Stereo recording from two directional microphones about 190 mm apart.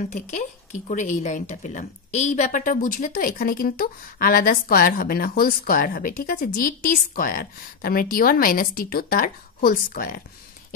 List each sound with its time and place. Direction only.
0.1 s speech: 40° left (ahead or behind)